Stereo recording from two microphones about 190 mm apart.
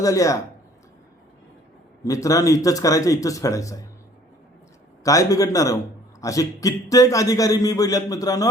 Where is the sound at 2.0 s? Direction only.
15° left (ahead or behind).